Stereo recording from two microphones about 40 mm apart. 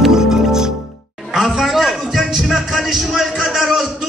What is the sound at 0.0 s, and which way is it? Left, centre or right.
Music, centre.